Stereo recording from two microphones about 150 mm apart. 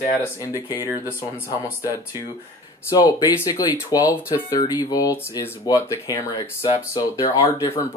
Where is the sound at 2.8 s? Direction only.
25° left (ahead or behind).